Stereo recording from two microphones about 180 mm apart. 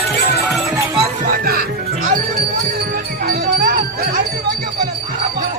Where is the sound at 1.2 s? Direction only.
55° right (ahead or behind).